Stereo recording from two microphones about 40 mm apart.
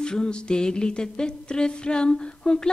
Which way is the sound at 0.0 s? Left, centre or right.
Left.